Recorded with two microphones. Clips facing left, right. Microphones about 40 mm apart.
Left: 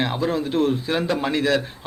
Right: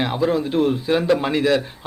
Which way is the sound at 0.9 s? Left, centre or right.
Centre.